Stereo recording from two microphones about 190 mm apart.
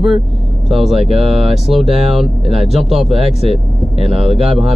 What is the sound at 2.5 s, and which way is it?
Speech, 30° right (ahead or behind).